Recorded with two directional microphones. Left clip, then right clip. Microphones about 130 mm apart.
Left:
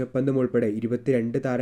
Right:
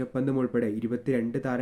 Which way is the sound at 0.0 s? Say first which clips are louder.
Left 4 dB; 20° left (ahead or behind).